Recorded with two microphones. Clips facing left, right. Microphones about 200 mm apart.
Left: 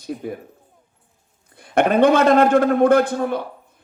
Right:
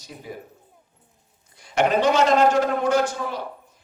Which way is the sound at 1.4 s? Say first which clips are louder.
Left 3 dB; 55° left (ahead or behind).